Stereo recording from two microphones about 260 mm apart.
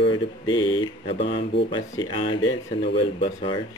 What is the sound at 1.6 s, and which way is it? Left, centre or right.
Speech, centre.